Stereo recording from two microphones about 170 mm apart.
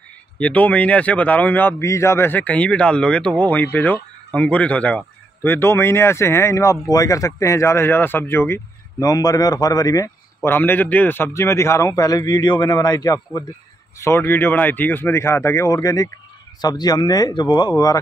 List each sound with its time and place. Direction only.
0.4 s a man's voice: 10° left (ahead or behind)